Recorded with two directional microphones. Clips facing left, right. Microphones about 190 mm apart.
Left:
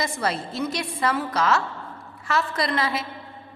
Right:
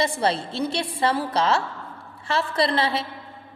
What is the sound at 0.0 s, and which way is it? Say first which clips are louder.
A woman's voice: right 4 dB; 30° right (ahead or behind).